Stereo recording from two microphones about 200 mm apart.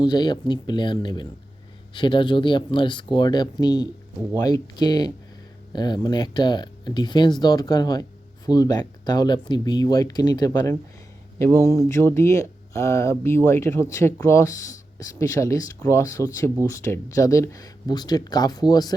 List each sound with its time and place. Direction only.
0.0 s speech: 20° left (ahead or behind)